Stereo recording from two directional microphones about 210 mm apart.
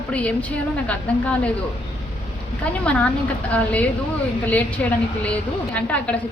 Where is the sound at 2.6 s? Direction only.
5° left (ahead or behind).